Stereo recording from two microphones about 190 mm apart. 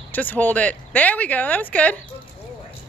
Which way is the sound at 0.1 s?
10° left (ahead or behind).